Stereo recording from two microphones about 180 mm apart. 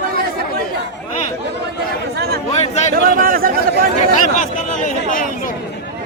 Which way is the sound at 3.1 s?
50° right (ahead or behind).